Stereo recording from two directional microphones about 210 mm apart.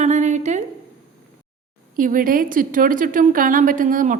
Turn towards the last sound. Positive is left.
turn(degrees=-40)  # may be behind; listen again after turning